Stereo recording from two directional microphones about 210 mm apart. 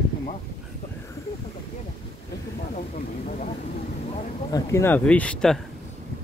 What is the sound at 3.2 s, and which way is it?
Vehicle, 40° left (ahead or behind).